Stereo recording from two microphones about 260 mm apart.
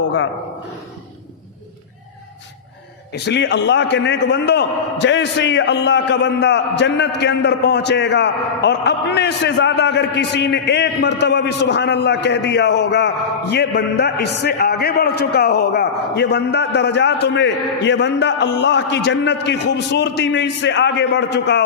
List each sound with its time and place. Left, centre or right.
3.1 s a man's voice: left